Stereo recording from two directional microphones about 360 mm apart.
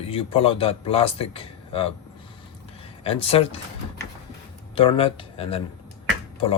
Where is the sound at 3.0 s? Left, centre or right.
Centre.